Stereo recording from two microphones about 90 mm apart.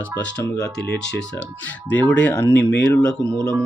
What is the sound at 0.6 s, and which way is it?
Speech, 10° left (ahead or behind).